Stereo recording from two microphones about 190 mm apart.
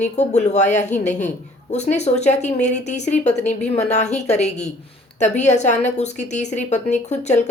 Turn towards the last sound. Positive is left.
turn(degrees=35)  # may be behind; listen again after turning